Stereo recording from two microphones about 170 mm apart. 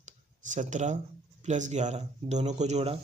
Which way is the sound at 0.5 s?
45° right (ahead or behind).